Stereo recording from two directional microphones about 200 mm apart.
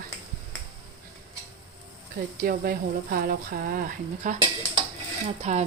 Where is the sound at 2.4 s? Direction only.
45° right (ahead or behind).